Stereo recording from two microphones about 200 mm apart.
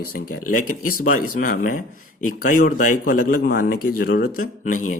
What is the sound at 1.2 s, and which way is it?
Speech, 45° left (ahead or behind).